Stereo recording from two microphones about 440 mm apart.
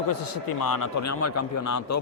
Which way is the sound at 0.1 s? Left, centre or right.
Left.